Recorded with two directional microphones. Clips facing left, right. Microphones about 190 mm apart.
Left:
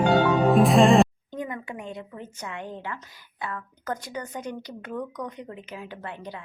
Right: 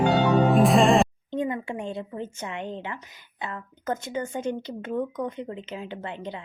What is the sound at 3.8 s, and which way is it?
Speech, 25° right (ahead or behind).